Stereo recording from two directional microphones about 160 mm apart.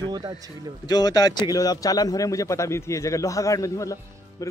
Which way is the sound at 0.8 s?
25° left (ahead or behind).